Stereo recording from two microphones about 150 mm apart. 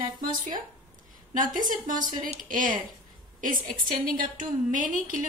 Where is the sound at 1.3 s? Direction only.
60° right (ahead or behind).